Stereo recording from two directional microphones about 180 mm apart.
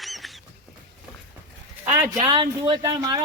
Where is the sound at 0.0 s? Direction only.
Centre (ahead or behind).